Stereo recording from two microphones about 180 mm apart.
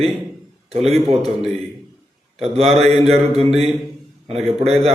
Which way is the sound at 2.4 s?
35° right (ahead or behind).